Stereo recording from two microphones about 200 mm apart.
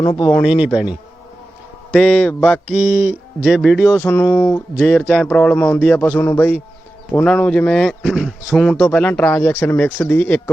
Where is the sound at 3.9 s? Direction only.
10° left (ahead or behind).